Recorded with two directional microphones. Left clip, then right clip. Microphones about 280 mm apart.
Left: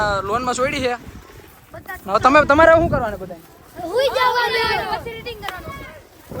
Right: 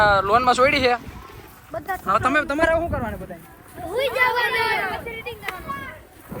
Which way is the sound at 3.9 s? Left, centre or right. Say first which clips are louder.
Left 3 dB; centre.